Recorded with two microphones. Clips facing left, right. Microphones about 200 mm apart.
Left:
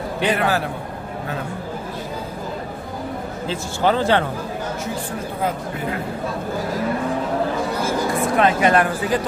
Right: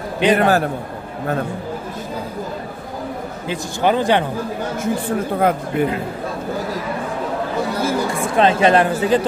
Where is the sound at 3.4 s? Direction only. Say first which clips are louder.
Right 1 dB; 15° right (ahead or behind).